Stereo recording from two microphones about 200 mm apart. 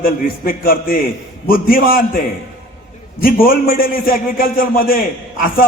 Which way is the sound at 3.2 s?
45° left (ahead or behind).